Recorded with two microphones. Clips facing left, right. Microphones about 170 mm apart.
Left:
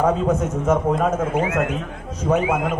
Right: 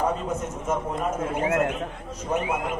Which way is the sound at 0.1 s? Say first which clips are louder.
Left 8 dB; 85° left.